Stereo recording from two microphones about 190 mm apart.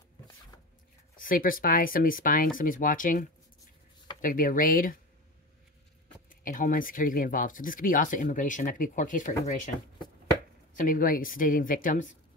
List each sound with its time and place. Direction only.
1.1 s speech: 45° left (ahead or behind)
6.4 s speech: 45° left (ahead or behind)
10.8 s speech: 45° left (ahead or behind)